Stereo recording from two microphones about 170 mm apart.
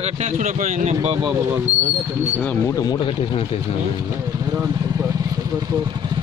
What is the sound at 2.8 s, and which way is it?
Speech, 25° left (ahead or behind).